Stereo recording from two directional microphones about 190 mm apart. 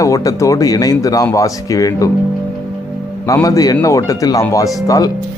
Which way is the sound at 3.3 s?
15° left (ahead or behind).